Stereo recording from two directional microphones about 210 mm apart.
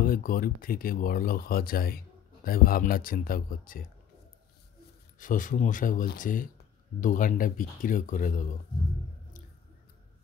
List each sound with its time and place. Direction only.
0.0 s speech: 45° left (ahead or behind)
5.2 s speech: 40° left (ahead or behind)